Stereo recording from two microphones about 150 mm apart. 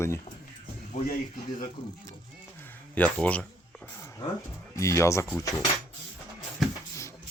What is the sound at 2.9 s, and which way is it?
Speech, 10° left (ahead or behind).